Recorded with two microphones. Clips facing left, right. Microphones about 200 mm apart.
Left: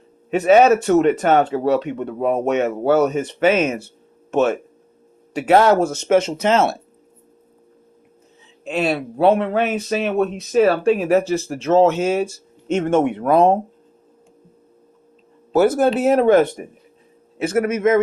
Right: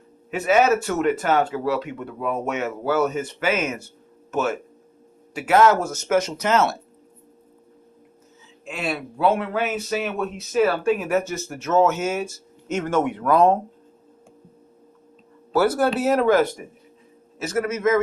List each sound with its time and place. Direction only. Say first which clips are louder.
0.3 s speech: left 6 dB; 30° left (ahead or behind)
8.9 s speech: left 5 dB; 30° left (ahead or behind)
15.5 s speech: left 4 dB; 25° left (ahead or behind)
16.6 s speech: left 5 dB; 35° left (ahead or behind)